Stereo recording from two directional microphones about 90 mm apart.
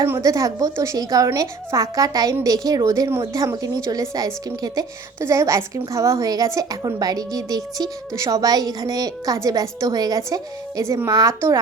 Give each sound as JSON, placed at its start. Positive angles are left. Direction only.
{"t": 0.0, "sound": "speech", "side_deg": -35}